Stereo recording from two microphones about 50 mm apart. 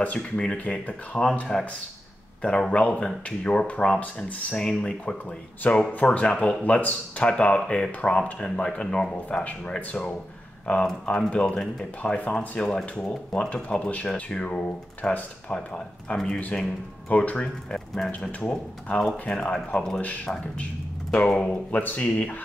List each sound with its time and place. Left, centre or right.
0.4 s speech: left
9.4 s speech: left
10.8 s speech: centre
13.7 s speech: left
17.6 s speech: centre
20.3 s speech: left